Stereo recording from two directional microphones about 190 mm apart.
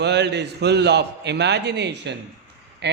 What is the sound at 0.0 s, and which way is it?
A man's voice, 65° right (ahead or behind).